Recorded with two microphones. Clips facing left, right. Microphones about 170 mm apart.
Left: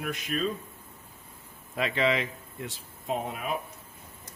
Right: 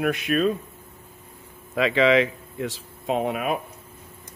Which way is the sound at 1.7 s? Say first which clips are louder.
Right 8 dB; 90° right.